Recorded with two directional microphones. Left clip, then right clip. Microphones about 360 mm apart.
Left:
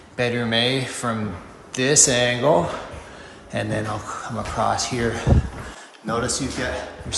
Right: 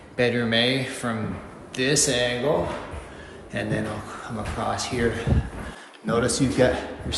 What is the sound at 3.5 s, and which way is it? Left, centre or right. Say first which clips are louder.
A man's voice: left 3 dB; centre.